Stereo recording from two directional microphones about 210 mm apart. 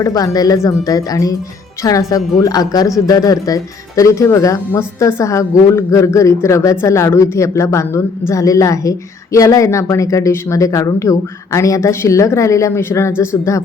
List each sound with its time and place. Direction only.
0.0 s a woman's voice: 15° left (ahead or behind)